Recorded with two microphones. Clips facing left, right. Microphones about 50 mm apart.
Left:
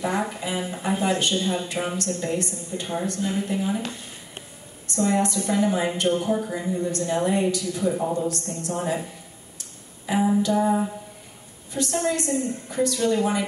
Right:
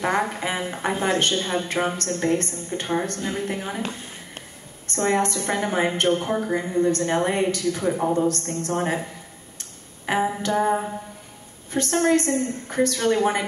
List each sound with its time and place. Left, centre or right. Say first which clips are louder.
0.0 s a woman's voice: right 3 dB; right
4.8 s a woman's voice: right 1 dB; right
9.6 s a sound: right 1 dB; right
11.7 s a woman's voice: right 5 dB; right